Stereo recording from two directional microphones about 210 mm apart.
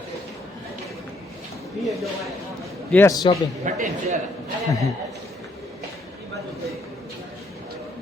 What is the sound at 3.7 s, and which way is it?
Speech, 35° right (ahead or behind).